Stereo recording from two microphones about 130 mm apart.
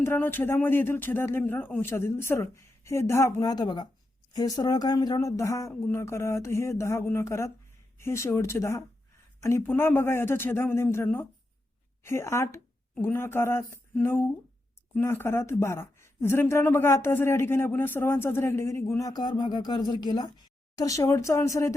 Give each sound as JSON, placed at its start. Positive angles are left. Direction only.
{"t": 0.0, "sound": "speech", "side_deg": 15}